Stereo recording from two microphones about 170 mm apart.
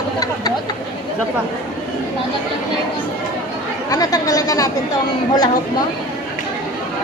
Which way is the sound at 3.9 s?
20° left (ahead or behind).